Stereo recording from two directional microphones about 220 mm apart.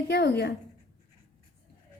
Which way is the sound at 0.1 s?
50° left (ahead or behind).